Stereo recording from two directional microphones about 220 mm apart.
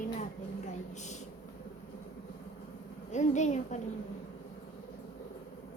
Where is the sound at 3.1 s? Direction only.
35° left (ahead or behind).